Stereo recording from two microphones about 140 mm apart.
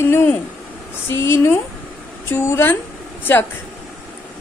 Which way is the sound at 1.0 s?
20° left (ahead or behind).